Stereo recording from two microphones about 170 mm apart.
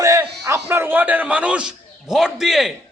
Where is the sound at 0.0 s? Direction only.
20° right (ahead or behind).